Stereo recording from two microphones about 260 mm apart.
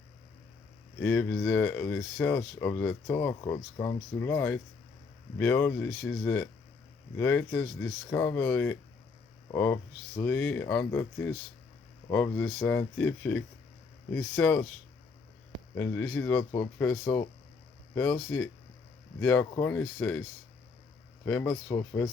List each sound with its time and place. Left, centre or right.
1.0 s speech: centre
15.7 s speech: centre
21.2 s speech: centre